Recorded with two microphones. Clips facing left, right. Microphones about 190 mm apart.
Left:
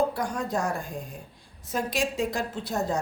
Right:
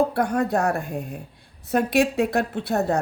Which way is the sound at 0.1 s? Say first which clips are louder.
Right 7 dB; 60° right (ahead or behind).